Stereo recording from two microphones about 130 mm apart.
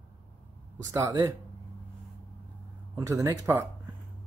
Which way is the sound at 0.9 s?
25° right (ahead or behind).